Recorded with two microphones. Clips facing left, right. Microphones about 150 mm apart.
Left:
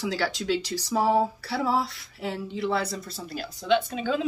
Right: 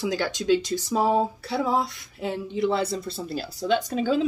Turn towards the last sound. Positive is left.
turn(degrees=-40)  # may be behind; listen again after turning